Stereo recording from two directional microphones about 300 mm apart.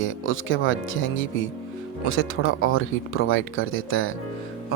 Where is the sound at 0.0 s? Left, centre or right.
Left.